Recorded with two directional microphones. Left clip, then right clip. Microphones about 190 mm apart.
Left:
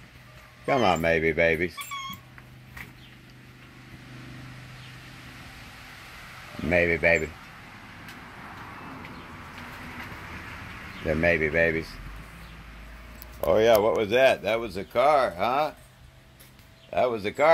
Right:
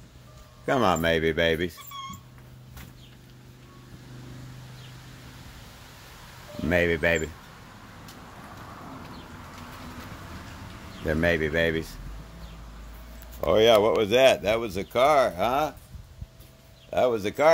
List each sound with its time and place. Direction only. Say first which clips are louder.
0.7 s speech: even; 5° right (ahead or behind)
6.7 s speech: left 2 dB; 5° right (ahead or behind)
11.1 s speech: left 1 dB; 5° right (ahead or behind)
13.4 s speech: right 1 dB; 15° right (ahead or behind)
16.9 s speech: right 1 dB; 20° right (ahead or behind)